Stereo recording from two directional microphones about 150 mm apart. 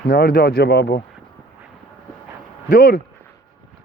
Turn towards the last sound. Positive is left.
turn(degrees=80)